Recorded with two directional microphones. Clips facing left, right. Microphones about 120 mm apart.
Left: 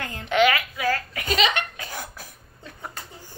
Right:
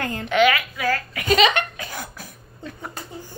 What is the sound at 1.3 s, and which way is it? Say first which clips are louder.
Laughter: right 5 dB; 55° right (ahead or behind).